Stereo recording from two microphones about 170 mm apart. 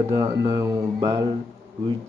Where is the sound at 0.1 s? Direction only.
20° right (ahead or behind).